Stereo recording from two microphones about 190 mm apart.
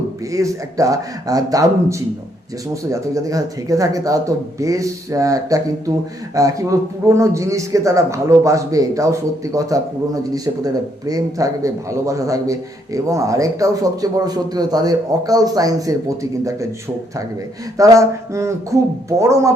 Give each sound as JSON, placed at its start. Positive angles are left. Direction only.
{"t": 0.3, "sound": "speech", "side_deg": -15}
{"t": 17.7, "sound": "speech", "side_deg": -15}